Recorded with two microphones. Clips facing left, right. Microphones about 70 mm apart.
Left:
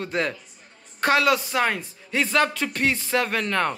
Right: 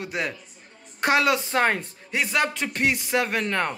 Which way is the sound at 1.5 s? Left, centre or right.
Right.